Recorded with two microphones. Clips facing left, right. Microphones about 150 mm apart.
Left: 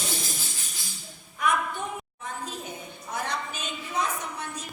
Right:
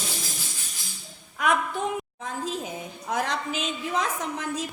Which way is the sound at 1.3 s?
90° right.